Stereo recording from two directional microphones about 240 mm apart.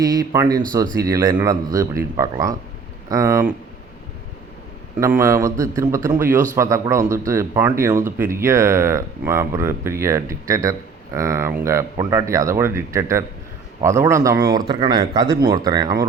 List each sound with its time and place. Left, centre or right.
0.0 s speech: centre
4.9 s speech: centre